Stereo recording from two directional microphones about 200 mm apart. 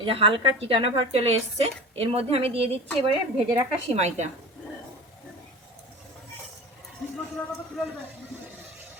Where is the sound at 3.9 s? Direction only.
35° right (ahead or behind).